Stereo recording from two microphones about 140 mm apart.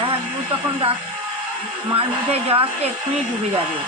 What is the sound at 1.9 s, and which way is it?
Speech, 40° right (ahead or behind).